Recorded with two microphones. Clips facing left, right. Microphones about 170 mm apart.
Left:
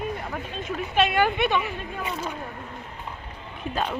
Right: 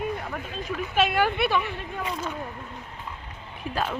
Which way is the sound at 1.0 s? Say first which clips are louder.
Left 1 dB; 5° right (ahead or behind).